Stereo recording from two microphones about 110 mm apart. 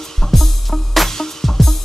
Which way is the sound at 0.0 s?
5° left (ahead or behind).